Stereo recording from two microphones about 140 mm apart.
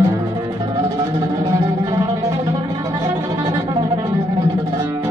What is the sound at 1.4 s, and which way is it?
Music, 25° right (ahead or behind).